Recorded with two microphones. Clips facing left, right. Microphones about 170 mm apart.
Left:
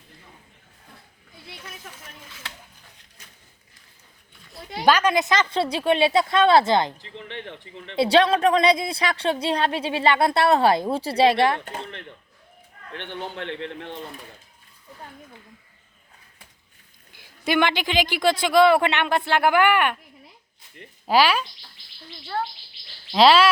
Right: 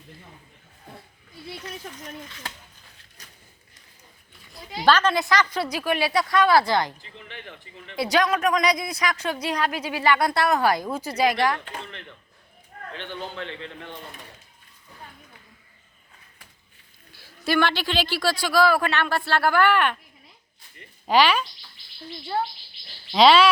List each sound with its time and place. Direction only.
2.0 s a man's voice: 5° left (ahead or behind)
3.2 s a sound: 40° right (ahead or behind)
4.8 s a woman's voice: 15° left (ahead or behind)
7.0 s speech: 80° left
7.9 s a woman's voice: 30° left (ahead or behind)
13.0 s a man's voice: 65° left (ahead or behind)
17.2 s a man's voice: 20° left (ahead or behind)
21.1 s a man's voice: 5° left (ahead or behind)
23.1 s speech: 5° left (ahead or behind)